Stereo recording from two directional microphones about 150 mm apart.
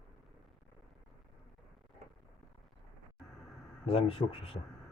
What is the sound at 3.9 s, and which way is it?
Speech, 40° left (ahead or behind).